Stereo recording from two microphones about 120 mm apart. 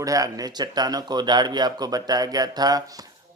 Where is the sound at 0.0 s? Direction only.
30° right (ahead or behind).